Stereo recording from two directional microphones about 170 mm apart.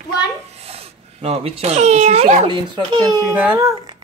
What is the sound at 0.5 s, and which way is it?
Speech, 35° right (ahead or behind).